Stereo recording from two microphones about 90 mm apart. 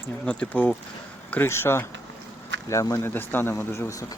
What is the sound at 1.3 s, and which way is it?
Speech, 25° left (ahead or behind).